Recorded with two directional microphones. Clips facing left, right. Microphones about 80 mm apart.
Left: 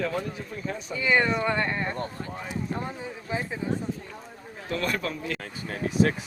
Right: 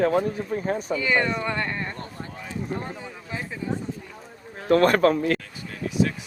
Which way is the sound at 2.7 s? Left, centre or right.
Centre.